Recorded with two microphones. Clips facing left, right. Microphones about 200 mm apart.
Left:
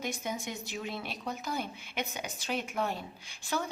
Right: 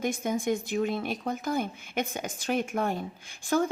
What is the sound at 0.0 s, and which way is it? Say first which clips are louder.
Speech: right 8 dB; 50° right (ahead or behind).